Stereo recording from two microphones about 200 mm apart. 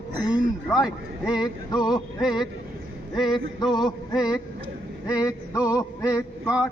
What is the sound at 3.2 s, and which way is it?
Music, 20° left (ahead or behind).